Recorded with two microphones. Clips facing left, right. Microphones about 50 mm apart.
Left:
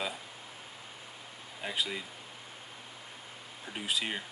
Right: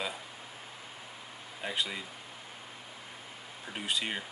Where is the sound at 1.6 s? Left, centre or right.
Centre.